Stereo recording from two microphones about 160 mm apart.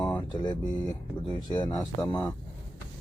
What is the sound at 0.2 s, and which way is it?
Speech, 25° left (ahead or behind).